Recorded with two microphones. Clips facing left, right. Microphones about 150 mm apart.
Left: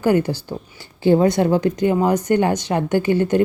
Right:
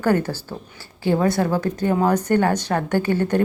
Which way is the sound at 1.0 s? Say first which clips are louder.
Left 4 dB; 25° left (ahead or behind).